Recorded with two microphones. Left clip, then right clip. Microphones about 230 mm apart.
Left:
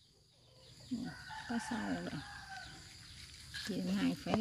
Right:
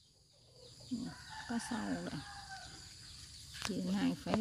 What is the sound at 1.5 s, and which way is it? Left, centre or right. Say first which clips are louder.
Speech: even; centre.